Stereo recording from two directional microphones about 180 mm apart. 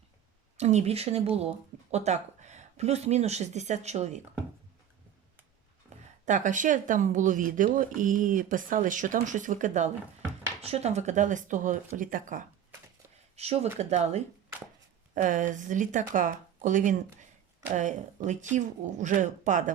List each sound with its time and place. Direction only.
0.5 s speech: 40° right (ahead or behind)
5.9 s a sound: 40° right (ahead or behind)
6.2 s speech: 45° right (ahead or behind)
13.3 s speech: 35° right (ahead or behind)